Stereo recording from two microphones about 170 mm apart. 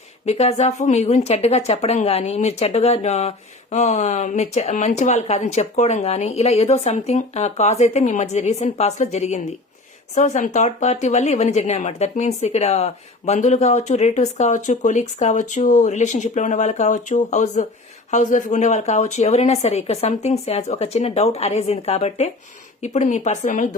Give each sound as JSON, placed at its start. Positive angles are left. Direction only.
{"t": 0.3, "sound": "a woman's voice", "side_deg": 40}